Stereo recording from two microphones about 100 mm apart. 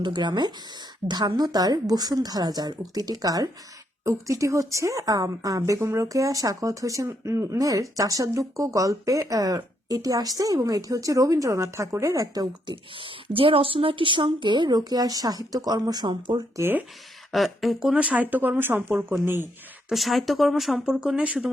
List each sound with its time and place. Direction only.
0.0 s a woman's voice: 45° right (ahead or behind)
12.7 s speech: 60° right (ahead or behind)
16.6 s speech: 20° right (ahead or behind)
17.3 s speech: centre (ahead or behind)
17.9 s speech: 15° right (ahead or behind)
19.9 s speech: centre (ahead or behind)